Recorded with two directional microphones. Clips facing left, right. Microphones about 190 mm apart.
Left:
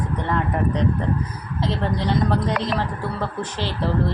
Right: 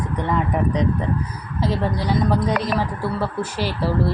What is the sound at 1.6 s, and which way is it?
A woman's voice, 10° right (ahead or behind).